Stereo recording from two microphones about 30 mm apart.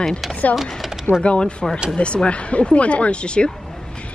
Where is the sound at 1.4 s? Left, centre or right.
Left.